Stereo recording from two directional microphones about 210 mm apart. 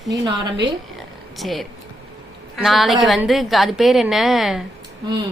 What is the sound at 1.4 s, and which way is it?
Speech, centre (ahead or behind).